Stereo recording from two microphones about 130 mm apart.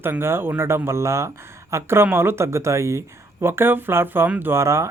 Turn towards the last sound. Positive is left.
turn(degrees=-20)  # may be behind; listen again after turning